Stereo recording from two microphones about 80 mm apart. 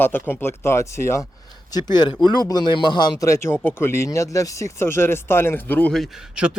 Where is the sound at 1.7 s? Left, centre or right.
Left.